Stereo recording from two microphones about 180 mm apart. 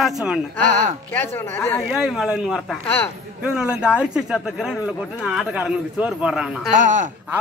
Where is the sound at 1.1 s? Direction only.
10° left (ahead or behind).